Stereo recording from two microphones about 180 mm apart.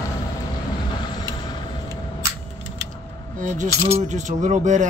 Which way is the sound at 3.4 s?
45° right (ahead or behind).